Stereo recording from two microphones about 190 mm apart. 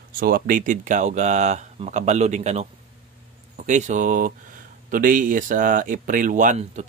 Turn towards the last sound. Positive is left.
turn(degrees=-40)  # may be behind; listen again after turning